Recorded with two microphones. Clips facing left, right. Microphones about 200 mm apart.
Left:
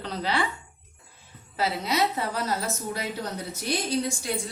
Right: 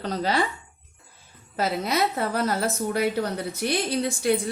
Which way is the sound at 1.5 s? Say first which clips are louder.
Right 2 dB; 50° right (ahead or behind).